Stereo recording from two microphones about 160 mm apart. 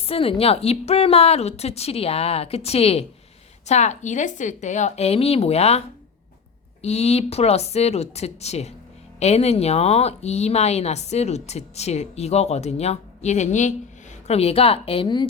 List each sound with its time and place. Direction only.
0.0 s a woman's voice: 35° left (ahead or behind)
6.8 s a woman's voice: 40° left (ahead or behind)